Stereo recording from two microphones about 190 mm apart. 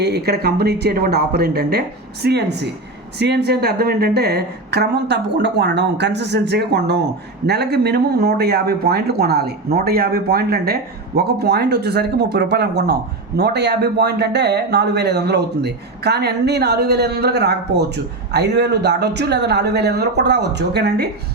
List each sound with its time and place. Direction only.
0.0 s speech: 60° right (ahead or behind)